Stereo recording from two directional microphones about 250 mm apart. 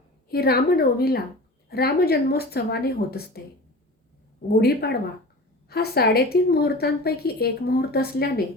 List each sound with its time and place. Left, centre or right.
0.3 s a woman's voice: left
4.6 s a woman's voice: left